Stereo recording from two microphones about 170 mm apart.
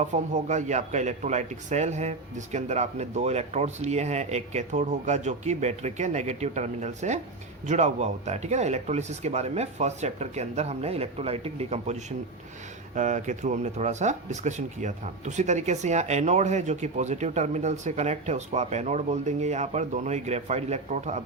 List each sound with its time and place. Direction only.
0.0 s speech: 45° right (ahead or behind)